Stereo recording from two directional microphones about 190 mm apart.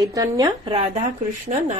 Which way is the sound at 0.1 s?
20° right (ahead or behind).